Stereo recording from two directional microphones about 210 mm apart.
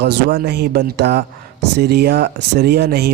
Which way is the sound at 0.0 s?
50° right (ahead or behind).